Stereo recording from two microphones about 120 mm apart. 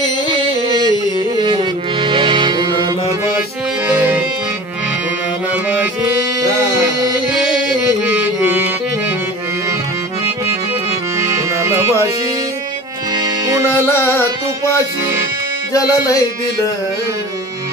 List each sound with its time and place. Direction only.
1.4 s music: 40° right (ahead or behind)
3.8 s music: 15° right (ahead or behind)
5.5 s music: 15° right (ahead or behind)
8.1 s music: 15° right (ahead or behind)
11.5 s music: 25° right (ahead or behind)
13.1 s music: 35° right (ahead or behind)
13.8 s music: 20° left (ahead or behind)
15.7 s speech: 30° left (ahead or behind)